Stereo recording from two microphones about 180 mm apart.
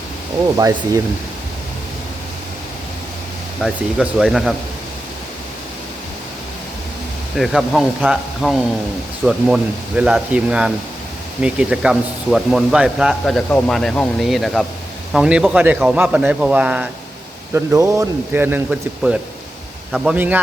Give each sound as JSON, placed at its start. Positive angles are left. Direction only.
{"t": 0.5, "sound": "a man's voice", "side_deg": -20}
{"t": 3.6, "sound": "speech", "side_deg": 0}
{"t": 7.3, "sound": "a man's voice", "side_deg": 0}